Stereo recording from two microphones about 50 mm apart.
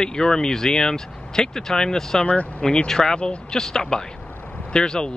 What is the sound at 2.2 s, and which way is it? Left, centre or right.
Speech, left.